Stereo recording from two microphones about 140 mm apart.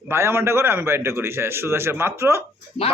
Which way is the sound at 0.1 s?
15° right (ahead or behind).